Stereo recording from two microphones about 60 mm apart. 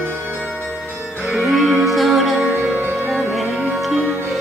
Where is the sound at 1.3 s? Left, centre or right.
Centre.